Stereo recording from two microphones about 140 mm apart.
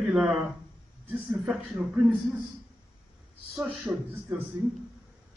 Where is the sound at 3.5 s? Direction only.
5° right (ahead or behind).